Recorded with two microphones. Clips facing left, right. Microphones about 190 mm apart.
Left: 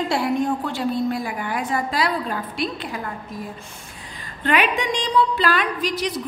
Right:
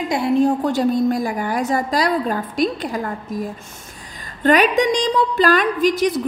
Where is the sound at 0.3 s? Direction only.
35° right (ahead or behind).